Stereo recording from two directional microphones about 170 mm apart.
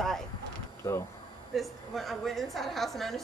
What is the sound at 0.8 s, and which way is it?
Speech, 15° left (ahead or behind).